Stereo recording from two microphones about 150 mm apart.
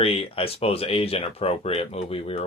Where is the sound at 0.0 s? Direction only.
40° left (ahead or behind).